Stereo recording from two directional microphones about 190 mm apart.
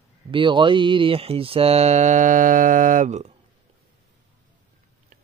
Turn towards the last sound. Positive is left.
turn(degrees=-40)  # may be behind; listen again after turning